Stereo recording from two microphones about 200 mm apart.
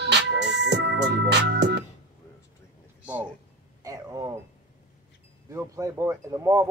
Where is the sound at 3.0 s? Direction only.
10° right (ahead or behind).